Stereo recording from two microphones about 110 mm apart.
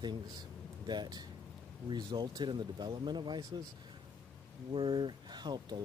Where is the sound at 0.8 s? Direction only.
40° right (ahead or behind).